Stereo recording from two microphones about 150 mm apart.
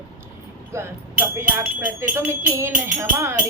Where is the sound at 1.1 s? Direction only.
10° right (ahead or behind).